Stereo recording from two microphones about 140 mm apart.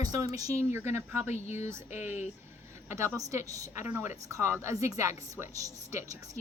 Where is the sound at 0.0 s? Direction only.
25° right (ahead or behind).